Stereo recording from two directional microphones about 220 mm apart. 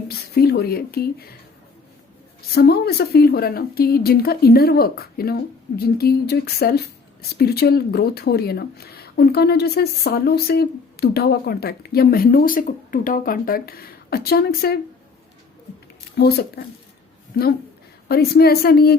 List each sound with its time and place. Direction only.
0.1 s a woman's voice: 45° left (ahead or behind)
2.6 s a woman's voice: 45° left (ahead or behind)
16.1 s a woman's voice: 45° left (ahead or behind)
18.1 s a woman's voice: 45° left (ahead or behind)